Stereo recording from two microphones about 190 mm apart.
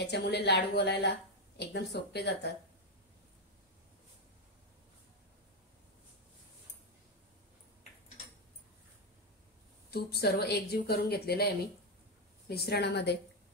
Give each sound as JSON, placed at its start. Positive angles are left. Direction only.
{"t": 0.0, "sound": "speech", "side_deg": 60}
{"t": 9.8, "sound": "speech", "side_deg": 55}